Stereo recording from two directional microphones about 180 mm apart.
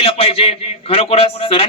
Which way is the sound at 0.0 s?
35° left (ahead or behind).